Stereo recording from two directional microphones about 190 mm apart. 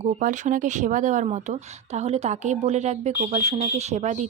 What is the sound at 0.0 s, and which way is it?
Speech, 40° right (ahead or behind).